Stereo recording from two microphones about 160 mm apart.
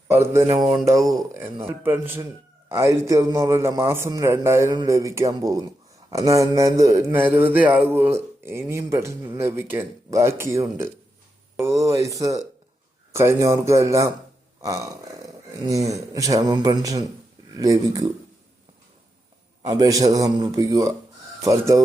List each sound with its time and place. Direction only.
0.1 s a man's voice: 15° right (ahead or behind)
19.6 s speech: 20° right (ahead or behind)